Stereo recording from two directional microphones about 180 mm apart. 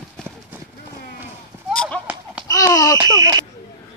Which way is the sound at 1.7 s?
5° left (ahead or behind).